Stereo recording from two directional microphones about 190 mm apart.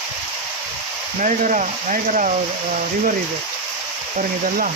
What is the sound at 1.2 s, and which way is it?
Speech, 40° right (ahead or behind).